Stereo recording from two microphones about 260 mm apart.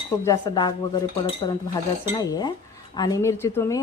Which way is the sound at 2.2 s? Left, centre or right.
Centre.